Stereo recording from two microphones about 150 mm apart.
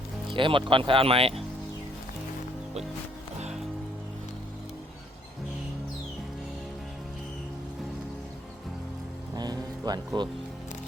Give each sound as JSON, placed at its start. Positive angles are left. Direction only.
{"t": 0.3, "sound": "speech", "side_deg": -35}
{"t": 9.3, "sound": "music", "side_deg": -25}